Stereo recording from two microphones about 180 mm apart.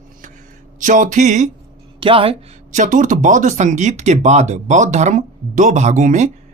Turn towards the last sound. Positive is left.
turn(degrees=-40)  # may be behind; listen again after turning